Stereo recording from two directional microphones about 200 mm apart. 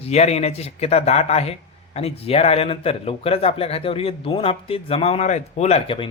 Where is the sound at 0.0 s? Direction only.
30° left (ahead or behind).